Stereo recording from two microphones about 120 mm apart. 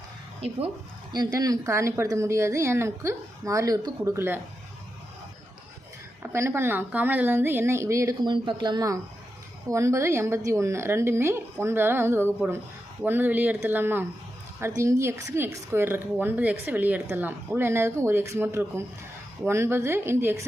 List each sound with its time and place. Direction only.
1.1 s speech: 35° right (ahead or behind)
6.3 s speech: 20° right (ahead or behind)
8.2 s speech: 40° right (ahead or behind); by 20.4 s 20° right (ahead or behind)